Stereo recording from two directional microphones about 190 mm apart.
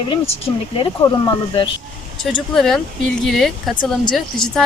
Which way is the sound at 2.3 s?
Centre (ahead or behind).